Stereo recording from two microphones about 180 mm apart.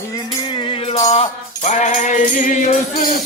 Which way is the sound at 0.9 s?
40° left (ahead or behind).